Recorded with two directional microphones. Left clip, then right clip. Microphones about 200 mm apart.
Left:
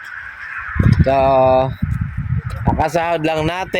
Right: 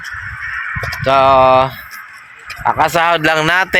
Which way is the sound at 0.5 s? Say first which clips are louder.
Even; 25° right (ahead or behind).